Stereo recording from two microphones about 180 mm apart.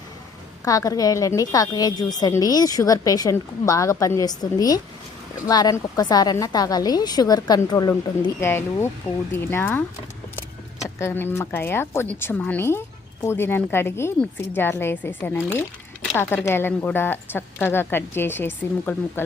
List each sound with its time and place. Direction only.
0.6 s a woman's voice: 20° left (ahead or behind)
10.8 s a woman's voice: 15° left (ahead or behind)